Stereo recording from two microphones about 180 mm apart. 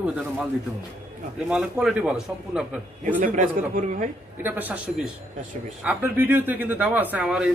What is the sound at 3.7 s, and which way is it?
Speech, 45° right (ahead or behind).